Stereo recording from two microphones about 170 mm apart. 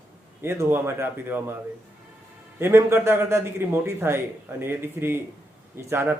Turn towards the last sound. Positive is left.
turn(degrees=-15)  # may be behind; listen again after turning